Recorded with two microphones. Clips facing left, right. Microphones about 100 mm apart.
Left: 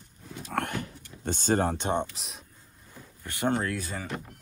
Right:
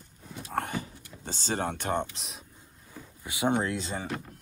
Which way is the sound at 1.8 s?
20° left (ahead or behind).